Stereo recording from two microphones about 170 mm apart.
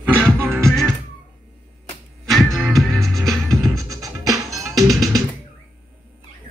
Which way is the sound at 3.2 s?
20° right (ahead or behind).